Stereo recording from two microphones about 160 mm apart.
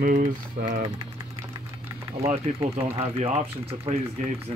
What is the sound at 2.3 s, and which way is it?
Speech, 40° right (ahead or behind).